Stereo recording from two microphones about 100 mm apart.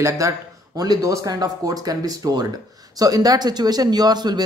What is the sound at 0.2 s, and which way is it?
A man's voice, 35° right (ahead or behind).